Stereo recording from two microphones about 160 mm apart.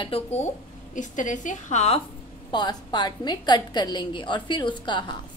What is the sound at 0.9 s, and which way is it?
A woman's voice, 50° left (ahead or behind).